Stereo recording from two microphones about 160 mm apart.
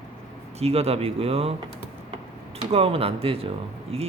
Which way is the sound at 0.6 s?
40° right (ahead or behind).